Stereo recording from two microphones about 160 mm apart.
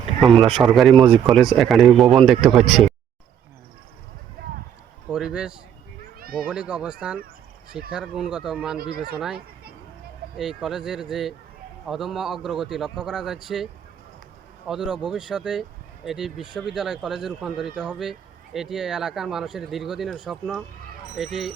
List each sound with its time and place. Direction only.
0.3 s speech: centre (ahead or behind)
5.0 s a man's voice: 5° right (ahead or behind)
6.1 s a sound: 65° right (ahead or behind)
6.5 s speech: 5° right (ahead or behind)
8.8 s speech: 75° right (ahead or behind)
9.1 s speech: 5° right (ahead or behind)
10.6 s speech: 5° right (ahead or behind)
14.7 s speech: 5° right (ahead or behind)